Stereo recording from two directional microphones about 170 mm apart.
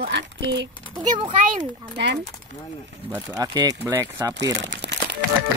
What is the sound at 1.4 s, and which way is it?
Speech, 50° right (ahead or behind).